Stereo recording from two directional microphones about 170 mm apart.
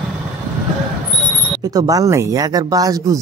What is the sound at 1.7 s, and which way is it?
Speech, 20° right (ahead or behind).